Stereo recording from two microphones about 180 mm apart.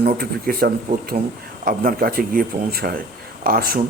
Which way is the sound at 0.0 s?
55° right (ahead or behind).